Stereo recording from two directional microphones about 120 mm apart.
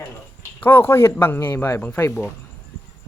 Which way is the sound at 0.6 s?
20° left (ahead or behind).